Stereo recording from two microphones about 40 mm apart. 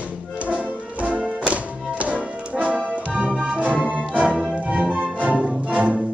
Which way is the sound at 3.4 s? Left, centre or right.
Right.